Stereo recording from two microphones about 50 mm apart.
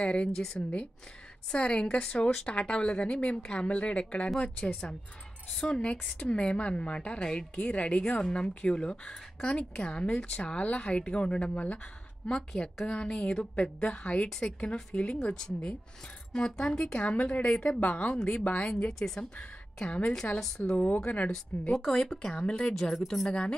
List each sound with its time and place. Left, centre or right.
0.0 s speech: centre
0.6 s speech: left
1.5 s speech: centre
5.7 s speech: left
12.3 s speech: centre
15.3 s speech: centre
17.7 s speech: left
18.9 s speech: centre
19.3 s a woman's voice: left
20.3 s speech: centre
20.7 s speech: left
21.3 s speech: centre